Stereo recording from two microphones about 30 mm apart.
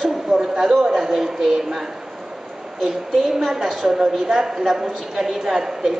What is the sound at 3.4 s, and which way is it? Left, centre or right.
A man's voice, centre.